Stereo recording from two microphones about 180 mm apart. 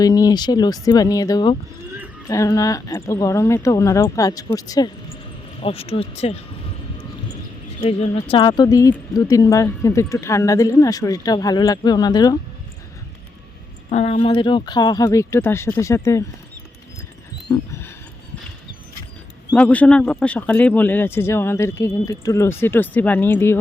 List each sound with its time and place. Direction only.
0.0 s speech: 20° left (ahead or behind)
5.5 s speech: 30° left (ahead or behind)
7.8 s speech: 35° left (ahead or behind)
13.9 s speech: 35° left (ahead or behind); by 16.2 s 15° left (ahead or behind)
17.7 s a sound: 15° left (ahead or behind)
19.5 s speech: 10° left (ahead or behind)